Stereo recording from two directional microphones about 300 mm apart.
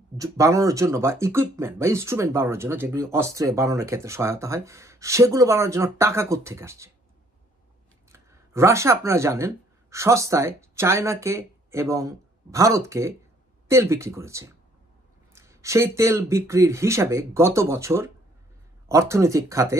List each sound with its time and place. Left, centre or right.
0.2 s speech: centre
8.1 s speech: centre